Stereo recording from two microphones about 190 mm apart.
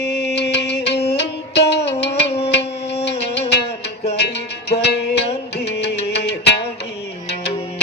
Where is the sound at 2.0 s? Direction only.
35° left (ahead or behind).